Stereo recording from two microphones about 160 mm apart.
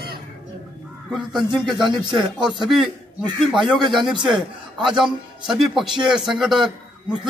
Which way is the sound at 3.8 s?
30° right (ahead or behind).